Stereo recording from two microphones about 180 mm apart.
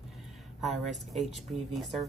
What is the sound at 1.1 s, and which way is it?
Speech, centre (ahead or behind).